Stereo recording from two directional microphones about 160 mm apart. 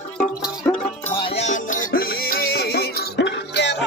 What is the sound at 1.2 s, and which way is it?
Music, 45° left (ahead or behind).